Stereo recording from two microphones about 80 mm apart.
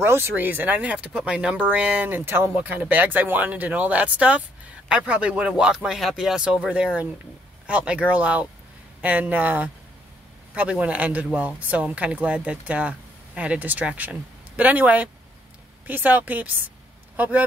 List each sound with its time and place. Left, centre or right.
0.0 s speech: right